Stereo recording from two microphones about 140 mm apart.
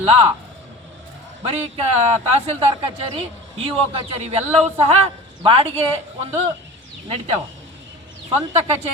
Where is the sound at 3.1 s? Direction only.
40° right (ahead or behind).